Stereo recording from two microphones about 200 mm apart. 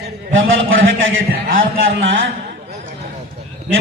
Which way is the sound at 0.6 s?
75° right (ahead or behind).